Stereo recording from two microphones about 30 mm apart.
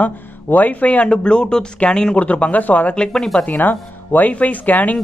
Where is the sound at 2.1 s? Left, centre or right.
Left.